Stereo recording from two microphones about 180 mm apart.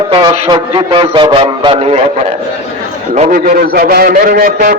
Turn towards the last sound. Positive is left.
turn(degrees=-50)  # may be behind; listen again after turning